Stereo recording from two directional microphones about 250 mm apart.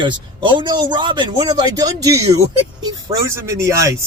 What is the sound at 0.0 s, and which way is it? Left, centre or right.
A man's voice, centre.